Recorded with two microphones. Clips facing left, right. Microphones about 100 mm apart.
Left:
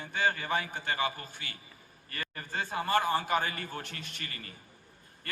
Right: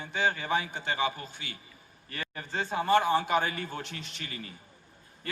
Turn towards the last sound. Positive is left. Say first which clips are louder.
# right 3 dB
turn(degrees=50)  # may be behind; listen again after turning